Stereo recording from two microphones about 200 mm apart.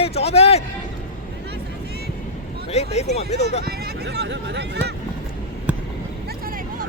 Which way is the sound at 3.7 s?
55° right (ahead or behind).